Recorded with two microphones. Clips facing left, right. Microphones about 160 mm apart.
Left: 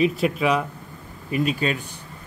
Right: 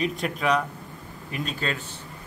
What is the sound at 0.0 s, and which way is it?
A man's voice, 5° left (ahead or behind).